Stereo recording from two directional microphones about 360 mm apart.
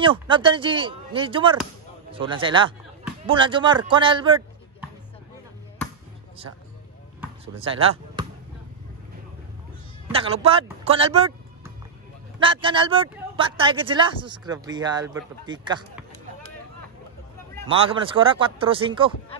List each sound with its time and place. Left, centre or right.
0.0 s speech: centre
7.6 s speech: centre
10.0 s speech: centre
17.6 s speech: centre